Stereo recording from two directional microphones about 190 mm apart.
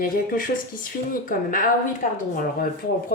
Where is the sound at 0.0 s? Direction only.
50° left (ahead or behind).